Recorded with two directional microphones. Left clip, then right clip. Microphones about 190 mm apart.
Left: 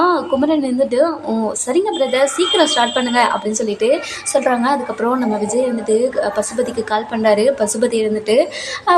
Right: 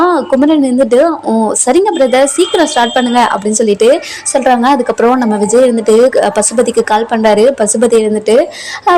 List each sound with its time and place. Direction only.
0.0 s a woman's voice: 35° right (ahead or behind)